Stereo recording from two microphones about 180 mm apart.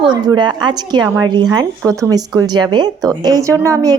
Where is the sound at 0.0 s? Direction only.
25° right (ahead or behind).